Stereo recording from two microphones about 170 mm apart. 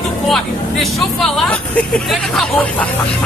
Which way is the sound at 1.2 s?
5° left (ahead or behind).